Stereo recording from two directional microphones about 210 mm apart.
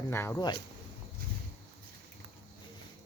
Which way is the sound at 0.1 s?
10° left (ahead or behind).